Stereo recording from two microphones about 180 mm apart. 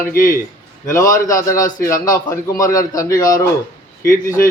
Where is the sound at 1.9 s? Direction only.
50° left (ahead or behind).